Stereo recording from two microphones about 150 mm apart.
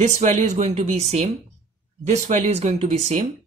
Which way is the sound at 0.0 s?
50° right (ahead or behind).